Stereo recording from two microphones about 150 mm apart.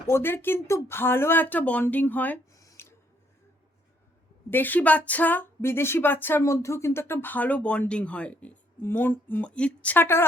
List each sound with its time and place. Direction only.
0.1 s speech: 15° left (ahead or behind)
2.5 s a sound: 25° left (ahead or behind)
4.5 s speech: 10° left (ahead or behind)